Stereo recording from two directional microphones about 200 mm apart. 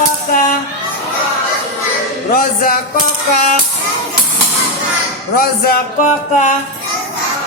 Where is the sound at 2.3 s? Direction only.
45° left (ahead or behind).